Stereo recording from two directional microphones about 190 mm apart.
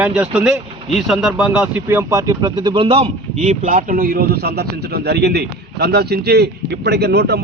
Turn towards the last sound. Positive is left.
turn(degrees=-60)  # may be behind; listen again after turning